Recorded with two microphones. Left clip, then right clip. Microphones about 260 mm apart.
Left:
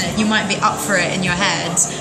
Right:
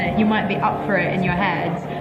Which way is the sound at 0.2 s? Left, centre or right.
Left.